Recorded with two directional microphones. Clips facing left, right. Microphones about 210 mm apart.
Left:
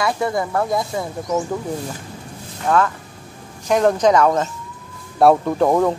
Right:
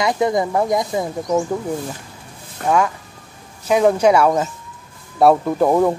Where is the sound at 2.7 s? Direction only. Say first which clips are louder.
Even; 15° right (ahead or behind).